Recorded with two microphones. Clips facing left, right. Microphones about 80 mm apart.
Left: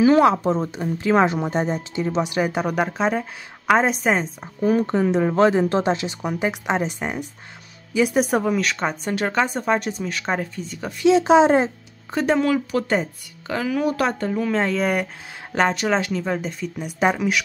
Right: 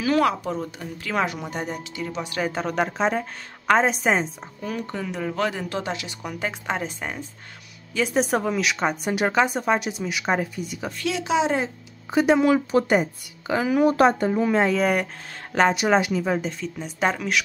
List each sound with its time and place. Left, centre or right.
0.0 s speech: left
2.8 s speech: centre
4.6 s speech: left; by 10.9 s centre
11.1 s speech: left
12.1 s a woman's voice: centre
12.4 s a woman's voice: right
14.2 s a woman's voice: centre
15.7 s speech: centre